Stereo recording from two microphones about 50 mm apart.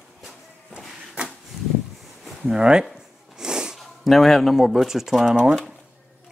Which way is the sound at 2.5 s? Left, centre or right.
Centre.